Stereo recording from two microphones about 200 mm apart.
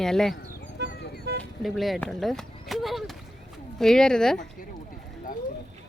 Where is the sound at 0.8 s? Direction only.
60° right (ahead or behind).